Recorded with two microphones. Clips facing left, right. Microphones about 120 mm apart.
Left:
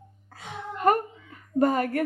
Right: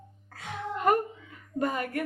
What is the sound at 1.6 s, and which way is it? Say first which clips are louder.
Speech: left 7 dB; 45° left (ahead or behind).